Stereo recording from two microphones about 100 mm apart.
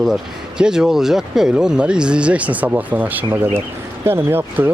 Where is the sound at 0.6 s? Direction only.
5° right (ahead or behind).